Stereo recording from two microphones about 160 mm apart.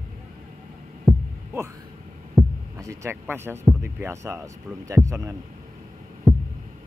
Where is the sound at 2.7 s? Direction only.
20° right (ahead or behind).